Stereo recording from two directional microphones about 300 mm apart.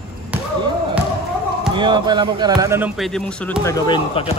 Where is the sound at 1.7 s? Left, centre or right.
Centre.